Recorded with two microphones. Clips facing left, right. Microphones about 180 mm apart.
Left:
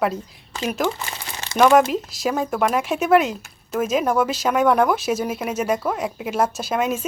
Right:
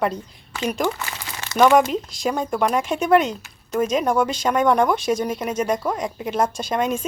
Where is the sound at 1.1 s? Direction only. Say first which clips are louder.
Even; 30° left (ahead or behind).